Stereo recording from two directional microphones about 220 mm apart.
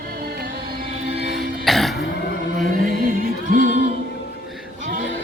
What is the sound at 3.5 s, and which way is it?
Music, 35° right (ahead or behind).